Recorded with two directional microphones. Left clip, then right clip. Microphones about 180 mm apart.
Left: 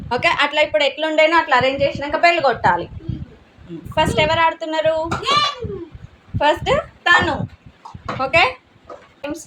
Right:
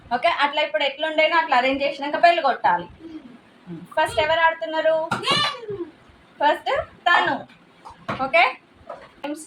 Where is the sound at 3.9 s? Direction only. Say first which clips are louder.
Left 4 dB; 55° left (ahead or behind).